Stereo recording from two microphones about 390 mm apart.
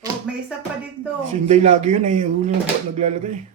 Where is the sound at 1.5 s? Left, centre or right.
Centre.